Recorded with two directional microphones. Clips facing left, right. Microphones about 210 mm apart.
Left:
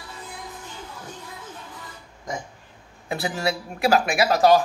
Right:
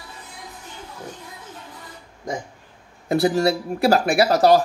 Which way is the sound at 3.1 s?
40° right (ahead or behind).